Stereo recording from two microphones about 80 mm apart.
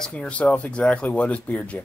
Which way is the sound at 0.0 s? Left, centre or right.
Centre.